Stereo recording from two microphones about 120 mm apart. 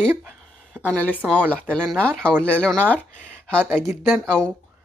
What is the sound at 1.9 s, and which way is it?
Speech, 10° left (ahead or behind).